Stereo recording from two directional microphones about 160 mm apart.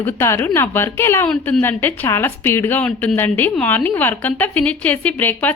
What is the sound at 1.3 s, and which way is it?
Speech, 5° left (ahead or behind).